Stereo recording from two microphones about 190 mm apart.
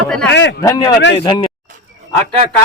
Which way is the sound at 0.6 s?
20° left (ahead or behind).